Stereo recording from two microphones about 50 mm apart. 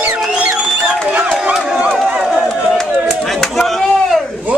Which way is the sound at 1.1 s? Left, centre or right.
Right.